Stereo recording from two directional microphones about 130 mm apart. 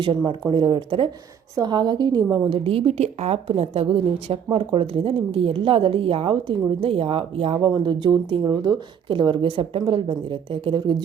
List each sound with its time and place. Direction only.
0.3 s a woman's voice: 35° right (ahead or behind)
2.3 s a woman's voice: 45° right (ahead or behind)